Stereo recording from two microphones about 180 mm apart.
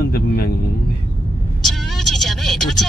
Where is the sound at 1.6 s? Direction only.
Centre (ahead or behind).